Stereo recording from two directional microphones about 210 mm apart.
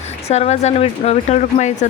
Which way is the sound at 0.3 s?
30° left (ahead or behind).